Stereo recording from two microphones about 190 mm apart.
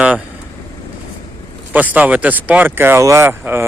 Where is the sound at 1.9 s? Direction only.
10° right (ahead or behind).